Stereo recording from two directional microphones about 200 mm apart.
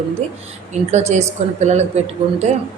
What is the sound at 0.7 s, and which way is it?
Speech, 35° right (ahead or behind).